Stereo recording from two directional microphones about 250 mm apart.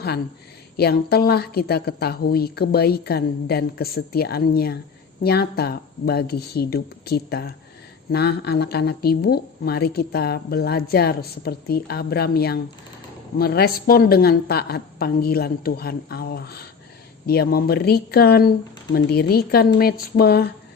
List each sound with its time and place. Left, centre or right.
0.8 s speech: left